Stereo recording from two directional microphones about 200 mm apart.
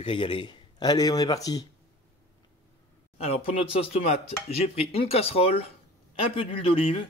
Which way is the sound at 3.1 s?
30° left (ahead or behind).